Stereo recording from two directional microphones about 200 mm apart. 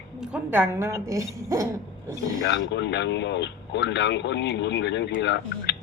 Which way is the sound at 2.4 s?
60° left (ahead or behind).